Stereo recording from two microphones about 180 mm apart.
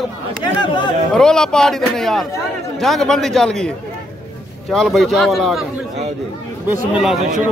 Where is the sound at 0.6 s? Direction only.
25° left (ahead or behind).